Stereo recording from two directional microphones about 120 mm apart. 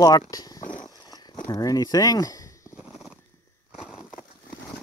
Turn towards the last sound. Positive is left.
turn(degrees=-5)  # may be behind; listen again after turning